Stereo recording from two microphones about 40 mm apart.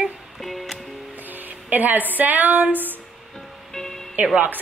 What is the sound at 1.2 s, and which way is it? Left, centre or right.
Speech, right.